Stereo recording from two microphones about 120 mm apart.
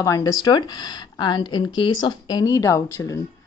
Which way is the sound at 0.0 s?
30° left (ahead or behind).